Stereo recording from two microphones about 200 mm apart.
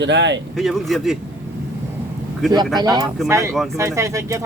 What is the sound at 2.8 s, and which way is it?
Speech, 20° right (ahead or behind).